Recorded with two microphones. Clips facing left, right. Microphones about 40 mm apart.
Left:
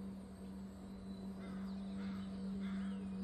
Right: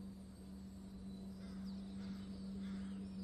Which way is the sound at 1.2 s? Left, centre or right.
Left.